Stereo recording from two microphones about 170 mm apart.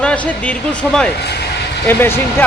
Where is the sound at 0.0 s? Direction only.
5° left (ahead or behind).